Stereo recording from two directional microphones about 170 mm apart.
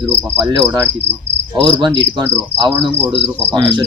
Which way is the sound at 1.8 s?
25° right (ahead or behind).